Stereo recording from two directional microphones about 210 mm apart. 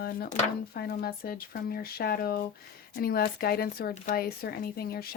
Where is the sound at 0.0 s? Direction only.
45° left (ahead or behind).